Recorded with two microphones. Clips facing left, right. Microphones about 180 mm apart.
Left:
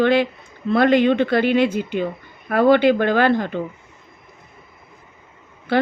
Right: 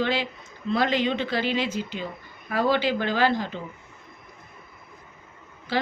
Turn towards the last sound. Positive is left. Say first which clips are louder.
# left 9 dB
turn(degrees=55)  # may be behind; listen again after turning